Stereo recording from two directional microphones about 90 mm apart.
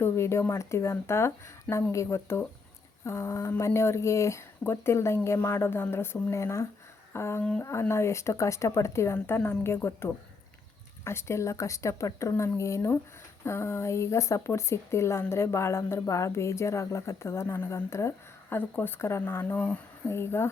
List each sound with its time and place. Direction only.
0.0 s speech: 30° left (ahead or behind)